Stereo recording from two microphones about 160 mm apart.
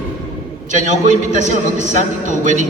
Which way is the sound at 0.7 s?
50° right (ahead or behind).